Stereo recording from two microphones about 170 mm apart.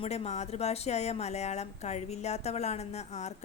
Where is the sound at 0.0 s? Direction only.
35° left (ahead or behind).